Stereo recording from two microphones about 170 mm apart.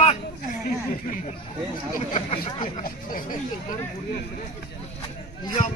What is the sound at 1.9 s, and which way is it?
Speech, 35° left (ahead or behind).